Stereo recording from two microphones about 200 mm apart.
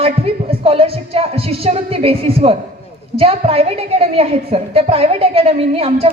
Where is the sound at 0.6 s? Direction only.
30° right (ahead or behind).